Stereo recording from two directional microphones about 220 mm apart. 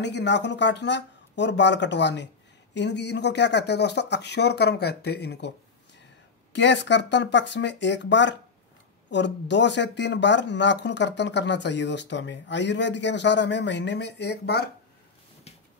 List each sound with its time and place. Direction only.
0.0 s speech: 50° left (ahead or behind)
6.5 s speech: 55° left (ahead or behind)